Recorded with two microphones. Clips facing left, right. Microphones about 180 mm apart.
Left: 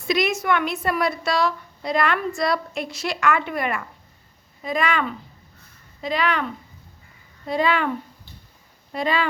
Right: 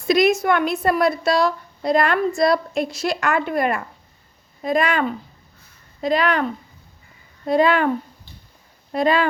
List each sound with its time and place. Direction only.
0.1 s a woman's voice: 40° right (ahead or behind)